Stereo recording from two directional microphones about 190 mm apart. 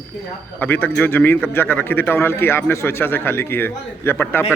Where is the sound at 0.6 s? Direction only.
10° left (ahead or behind).